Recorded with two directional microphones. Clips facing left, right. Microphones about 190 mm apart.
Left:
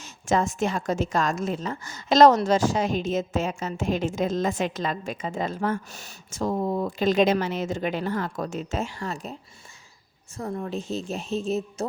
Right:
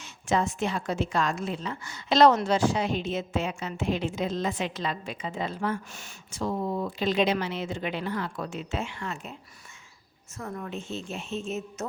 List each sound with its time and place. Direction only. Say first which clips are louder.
0.0 s a woman's voice: left 3 dB; 45° left (ahead or behind)